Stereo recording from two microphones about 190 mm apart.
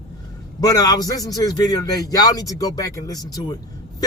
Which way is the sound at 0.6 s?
20° left (ahead or behind).